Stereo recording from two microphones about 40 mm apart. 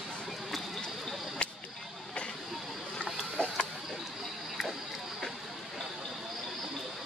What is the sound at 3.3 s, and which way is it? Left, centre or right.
Mechanisms, left.